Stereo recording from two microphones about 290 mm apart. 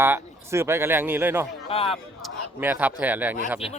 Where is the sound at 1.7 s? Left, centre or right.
Centre.